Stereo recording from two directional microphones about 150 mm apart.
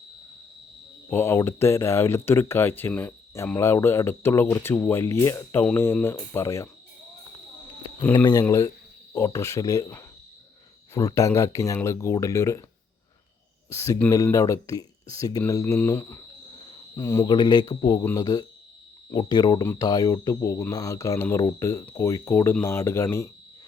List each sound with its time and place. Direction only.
1.1 s speech: 15° left (ahead or behind)
8.1 s speech: 25° left (ahead or behind)
13.7 s speech: 20° left (ahead or behind)
17.2 s speech: 30° left (ahead or behind)